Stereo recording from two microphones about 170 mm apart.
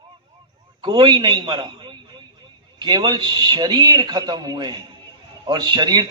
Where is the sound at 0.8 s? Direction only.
25° right (ahead or behind).